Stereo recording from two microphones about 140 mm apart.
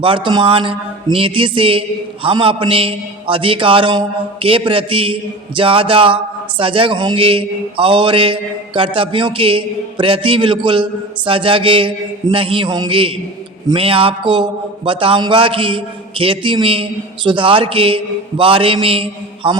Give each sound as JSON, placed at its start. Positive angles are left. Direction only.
{"t": 0.0, "sound": "a man's voice", "side_deg": -35}